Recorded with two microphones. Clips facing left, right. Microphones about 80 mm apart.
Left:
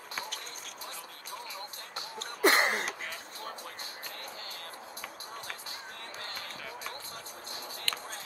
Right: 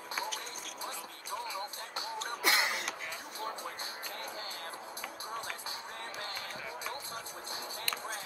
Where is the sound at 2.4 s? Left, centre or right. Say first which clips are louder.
Left 7 dB; left.